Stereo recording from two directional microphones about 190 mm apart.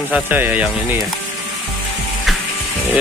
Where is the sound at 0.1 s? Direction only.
10° right (ahead or behind).